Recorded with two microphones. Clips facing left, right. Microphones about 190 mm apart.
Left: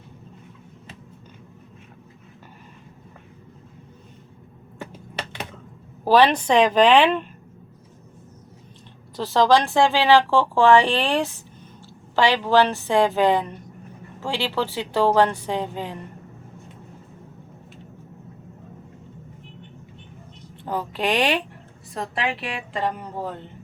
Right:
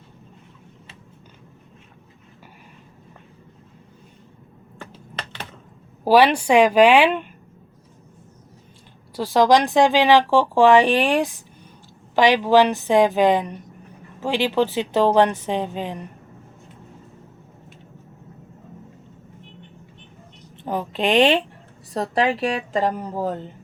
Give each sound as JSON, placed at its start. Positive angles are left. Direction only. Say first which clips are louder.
{"t": 4.8, "sound": "finger snapping", "louder": "left 3 dB", "side_deg": 15}
{"t": 6.1, "sound": "speech", "louder": "right 2 dB", "side_deg": -10}
{"t": 9.1, "sound": "a woman's voice", "louder": "right 2 dB", "side_deg": -15}
{"t": 20.7, "sound": "a woman's voice", "louder": "right 2 dB", "side_deg": -20}
{"t": 21.9, "sound": "a woman's voice", "louder": "right 6 dB", "side_deg": -40}